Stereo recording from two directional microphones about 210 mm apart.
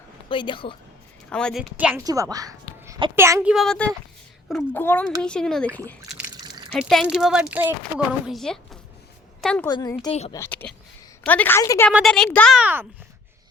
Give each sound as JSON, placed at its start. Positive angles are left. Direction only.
{"t": 0.3, "sound": "speech", "side_deg": 25}
{"t": 1.3, "sound": "speech", "side_deg": 5}
{"t": 1.7, "sound": "a child's voice", "side_deg": -10}
{"t": 3.5, "sound": "a woman's voice", "side_deg": 0}
{"t": 6.4, "sound": "a sound", "side_deg": -20}
{"t": 6.7, "sound": "a woman's voice", "side_deg": 0}
{"t": 9.6, "sound": "speech", "side_deg": 20}
{"t": 10.3, "sound": "a woman's voice", "side_deg": 10}
{"t": 11.9, "sound": "speech", "side_deg": 0}
{"t": 12.5, "sound": "a child's voice", "side_deg": -10}